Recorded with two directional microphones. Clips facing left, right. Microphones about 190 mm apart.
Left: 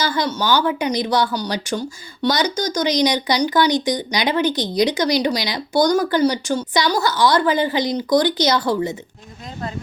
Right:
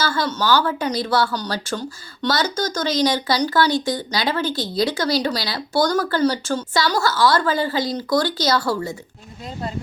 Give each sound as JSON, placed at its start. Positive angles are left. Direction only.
{"t": 0.0, "sound": "speech", "side_deg": 15}